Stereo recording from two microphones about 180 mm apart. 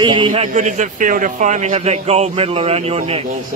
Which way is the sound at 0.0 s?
25° right (ahead or behind).